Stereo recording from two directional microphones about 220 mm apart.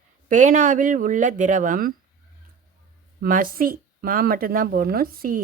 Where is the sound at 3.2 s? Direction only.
40° right (ahead or behind).